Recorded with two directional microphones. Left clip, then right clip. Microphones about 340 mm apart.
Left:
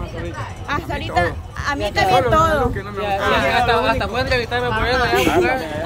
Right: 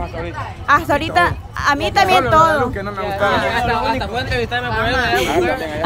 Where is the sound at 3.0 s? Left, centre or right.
Left.